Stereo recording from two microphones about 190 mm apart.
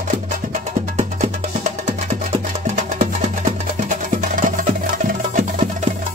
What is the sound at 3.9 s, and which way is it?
Music, 45° right (ahead or behind).